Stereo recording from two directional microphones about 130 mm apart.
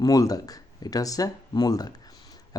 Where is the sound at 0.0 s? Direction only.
30° left (ahead or behind).